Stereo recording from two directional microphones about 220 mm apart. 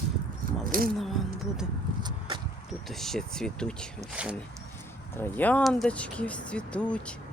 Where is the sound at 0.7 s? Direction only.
40° right (ahead or behind).